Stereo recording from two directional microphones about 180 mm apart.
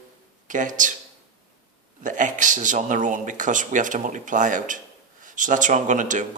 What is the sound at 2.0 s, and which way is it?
Speech, 45° right (ahead or behind).